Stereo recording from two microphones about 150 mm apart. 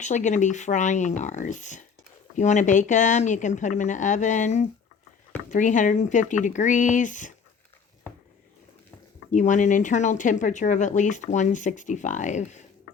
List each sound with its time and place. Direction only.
0.0 s speech: 55° left (ahead or behind)
9.3 s speech: 55° left (ahead or behind)